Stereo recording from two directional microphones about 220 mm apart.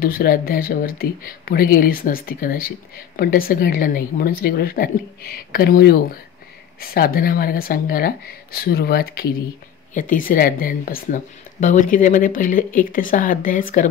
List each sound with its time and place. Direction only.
0.0 s a woman's voice: 40° left (ahead or behind)